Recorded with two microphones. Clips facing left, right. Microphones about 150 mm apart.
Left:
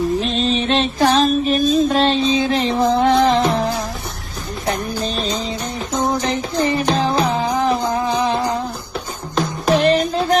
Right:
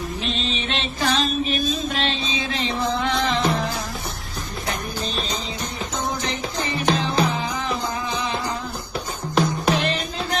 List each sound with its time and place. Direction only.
0.2 s music: 40° left (ahead or behind)
6.2 s music: 40° left (ahead or behind)
9.7 s music: 40° left (ahead or behind)